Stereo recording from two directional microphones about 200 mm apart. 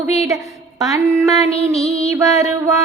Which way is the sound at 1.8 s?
15° right (ahead or behind).